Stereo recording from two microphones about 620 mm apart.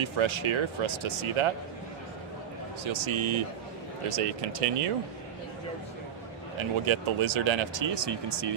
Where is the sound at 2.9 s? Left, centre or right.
Right.